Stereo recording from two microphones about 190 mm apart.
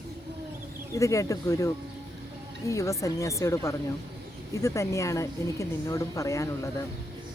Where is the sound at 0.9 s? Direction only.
15° left (ahead or behind).